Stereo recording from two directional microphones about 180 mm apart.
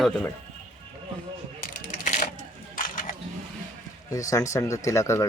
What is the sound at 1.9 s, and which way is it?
Vehicle, 45° left (ahead or behind).